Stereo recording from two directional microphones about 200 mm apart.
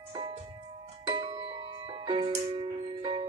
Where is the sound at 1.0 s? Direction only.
25° right (ahead or behind).